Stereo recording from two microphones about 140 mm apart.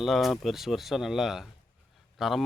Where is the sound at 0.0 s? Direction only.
Centre (ahead or behind).